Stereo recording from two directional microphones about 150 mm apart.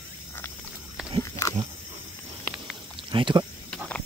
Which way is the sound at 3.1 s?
30° right (ahead or behind).